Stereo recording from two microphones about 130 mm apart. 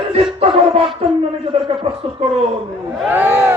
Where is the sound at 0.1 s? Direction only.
50° right (ahead or behind).